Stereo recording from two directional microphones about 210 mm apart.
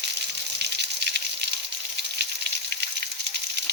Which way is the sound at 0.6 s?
50° right (ahead or behind).